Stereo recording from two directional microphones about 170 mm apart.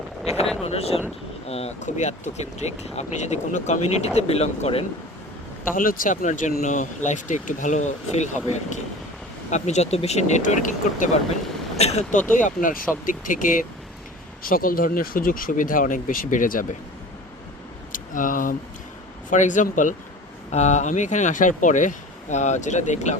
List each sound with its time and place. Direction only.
0.6 s speech: 35° left (ahead or behind)
5.7 s speech: 55° left (ahead or behind)
9.5 s speech: 40° left (ahead or behind)
12.4 s speech: 50° left (ahead or behind)
17.9 s a sound: 50° left (ahead or behind)
19.3 s speech: 45° left (ahead or behind)